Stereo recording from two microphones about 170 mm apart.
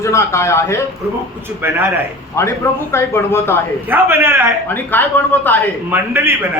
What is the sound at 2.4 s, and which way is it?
Speech, 15° left (ahead or behind).